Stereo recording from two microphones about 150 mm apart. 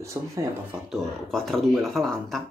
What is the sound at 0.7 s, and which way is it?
Speech, centre (ahead or behind).